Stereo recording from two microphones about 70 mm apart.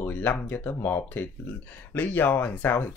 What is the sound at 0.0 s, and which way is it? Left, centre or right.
Speech, left.